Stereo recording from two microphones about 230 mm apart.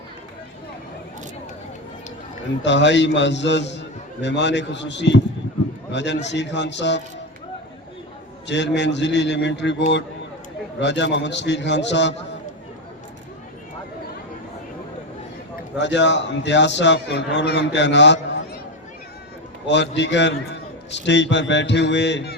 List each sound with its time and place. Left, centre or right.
2.6 s a man's voice: left
8.4 s a man's voice: left
15.8 s a man's voice: left
19.6 s a man's voice: left